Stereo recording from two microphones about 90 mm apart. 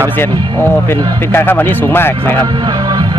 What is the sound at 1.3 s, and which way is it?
Speech, 25° left (ahead or behind).